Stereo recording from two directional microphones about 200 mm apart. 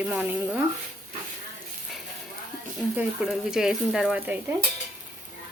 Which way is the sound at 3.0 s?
5° right (ahead or behind).